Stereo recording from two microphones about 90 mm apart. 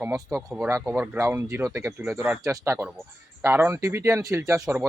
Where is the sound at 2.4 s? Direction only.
30° right (ahead or behind).